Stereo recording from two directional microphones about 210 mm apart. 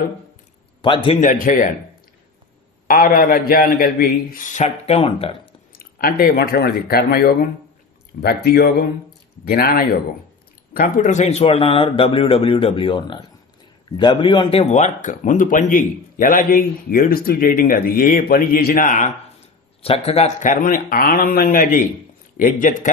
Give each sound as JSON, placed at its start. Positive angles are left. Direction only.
{"t": 0.8, "sound": "a man's voice", "side_deg": 25}
{"t": 1.2, "sound": "speech", "side_deg": 40}
{"t": 2.9, "sound": "speech", "side_deg": 40}
{"t": 5.7, "sound": "a man's voice", "side_deg": 45}